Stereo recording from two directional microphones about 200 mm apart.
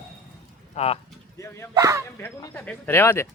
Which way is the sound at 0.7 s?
30° left (ahead or behind).